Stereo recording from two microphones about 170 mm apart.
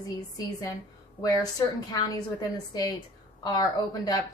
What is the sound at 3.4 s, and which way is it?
Speech, 20° left (ahead or behind).